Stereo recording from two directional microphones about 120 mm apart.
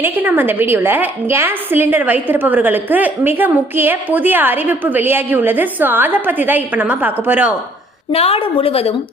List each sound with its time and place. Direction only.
0.0 s a woman's voice: 15° right (ahead or behind)
8.1 s a woman's voice: 55° left (ahead or behind)